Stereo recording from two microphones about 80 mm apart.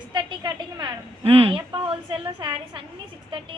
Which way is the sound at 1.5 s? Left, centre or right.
Right.